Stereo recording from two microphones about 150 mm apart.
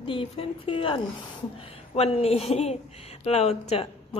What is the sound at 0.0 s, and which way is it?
A woman's voice, 35° left (ahead or behind).